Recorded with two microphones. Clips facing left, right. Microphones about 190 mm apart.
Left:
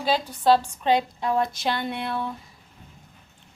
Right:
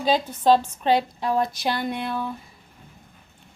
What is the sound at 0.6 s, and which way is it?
Speech, 20° left (ahead or behind).